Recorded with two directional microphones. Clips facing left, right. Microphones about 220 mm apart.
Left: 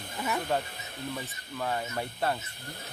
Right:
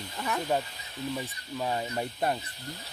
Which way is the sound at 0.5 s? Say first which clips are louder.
Right 1 dB; 10° right (ahead or behind).